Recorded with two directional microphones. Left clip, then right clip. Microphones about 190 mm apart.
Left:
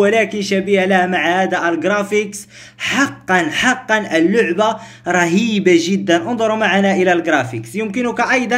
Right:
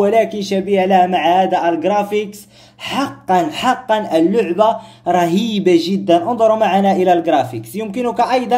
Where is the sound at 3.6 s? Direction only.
50° left (ahead or behind).